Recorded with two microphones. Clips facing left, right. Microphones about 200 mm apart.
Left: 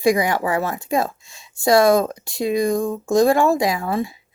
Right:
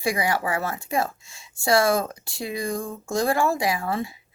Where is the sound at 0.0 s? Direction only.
20° left (ahead or behind).